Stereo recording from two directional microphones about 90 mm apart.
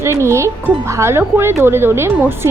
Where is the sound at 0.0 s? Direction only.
30° right (ahead or behind).